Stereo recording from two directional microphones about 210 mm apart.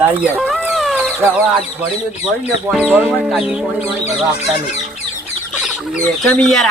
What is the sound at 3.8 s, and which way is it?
Speech, 30° left (ahead or behind).